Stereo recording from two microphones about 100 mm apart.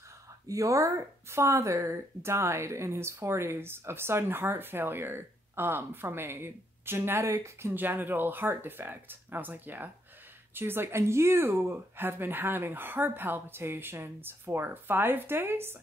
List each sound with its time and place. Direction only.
0.5 s speech: 30° right (ahead or behind)
7.7 s speech: 20° right (ahead or behind)